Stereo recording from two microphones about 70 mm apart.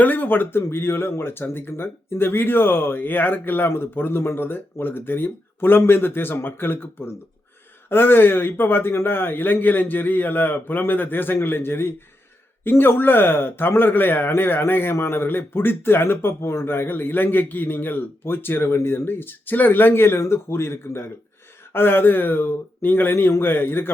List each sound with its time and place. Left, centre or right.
0.0 s speech: left